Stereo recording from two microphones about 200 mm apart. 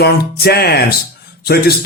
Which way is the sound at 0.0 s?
50° left (ahead or behind).